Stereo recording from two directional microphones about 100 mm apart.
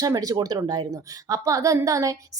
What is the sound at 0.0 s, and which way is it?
Speech, 40° right (ahead or behind).